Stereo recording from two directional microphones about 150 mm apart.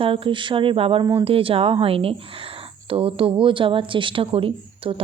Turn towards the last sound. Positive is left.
turn(degrees=-40)  # may be behind; listen again after turning